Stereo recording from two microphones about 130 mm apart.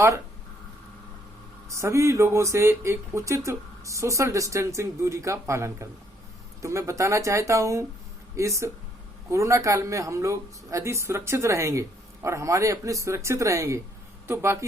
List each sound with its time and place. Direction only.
1.7 s speech: 20° right (ahead or behind)